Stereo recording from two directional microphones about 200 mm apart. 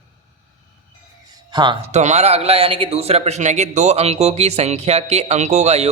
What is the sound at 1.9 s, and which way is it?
A man's voice, 35° right (ahead or behind).